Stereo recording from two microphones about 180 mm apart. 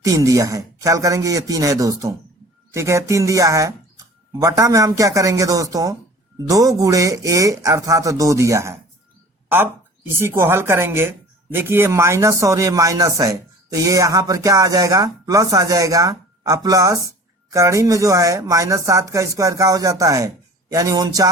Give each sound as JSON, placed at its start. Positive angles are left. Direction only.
{"t": 0.0, "sound": "a man's voice", "side_deg": -20}
{"t": 10.1, "sound": "speech", "side_deg": -15}